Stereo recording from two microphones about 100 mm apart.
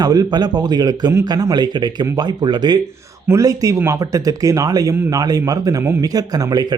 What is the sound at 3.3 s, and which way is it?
Speech, 35° right (ahead or behind).